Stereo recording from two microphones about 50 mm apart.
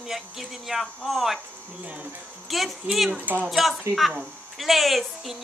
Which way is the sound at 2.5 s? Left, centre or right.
Centre.